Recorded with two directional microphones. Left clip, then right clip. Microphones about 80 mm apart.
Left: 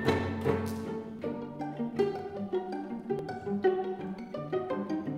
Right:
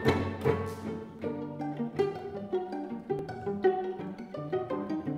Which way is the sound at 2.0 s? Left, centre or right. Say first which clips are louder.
Even; centre.